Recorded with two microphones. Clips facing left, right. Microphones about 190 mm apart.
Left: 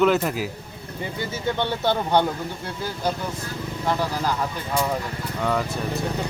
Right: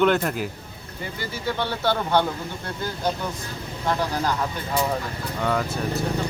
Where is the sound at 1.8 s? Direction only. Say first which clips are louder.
Even; 20° left (ahead or behind).